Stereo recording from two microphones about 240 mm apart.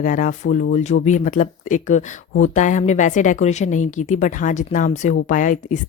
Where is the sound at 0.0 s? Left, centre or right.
Left.